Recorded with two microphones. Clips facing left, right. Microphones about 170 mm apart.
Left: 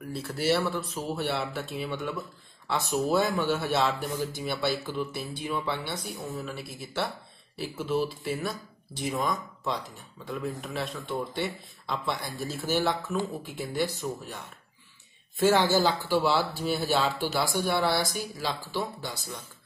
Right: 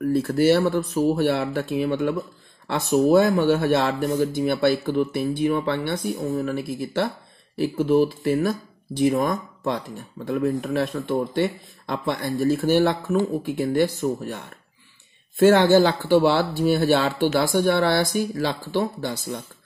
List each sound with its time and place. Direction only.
0.1 s speech: 40° right (ahead or behind)
0.7 s speech: 55° right (ahead or behind)